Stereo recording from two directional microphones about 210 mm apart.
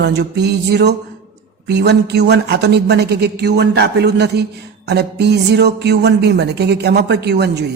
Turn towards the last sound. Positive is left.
turn(degrees=-50)  # may be behind; listen again after turning